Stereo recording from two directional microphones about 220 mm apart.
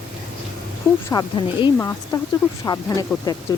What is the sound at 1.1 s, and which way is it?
Speech, 20° left (ahead or behind).